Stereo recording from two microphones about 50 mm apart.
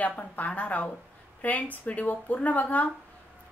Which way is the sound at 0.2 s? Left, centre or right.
Left.